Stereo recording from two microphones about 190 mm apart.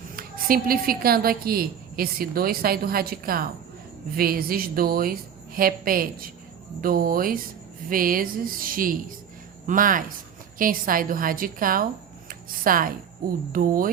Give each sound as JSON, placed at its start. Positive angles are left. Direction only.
{"t": 0.2, "sound": "a woman's voice", "side_deg": -50}
{"t": 12.3, "sound": "a sound", "side_deg": -50}
{"t": 13.5, "sound": "a woman's voice", "side_deg": -45}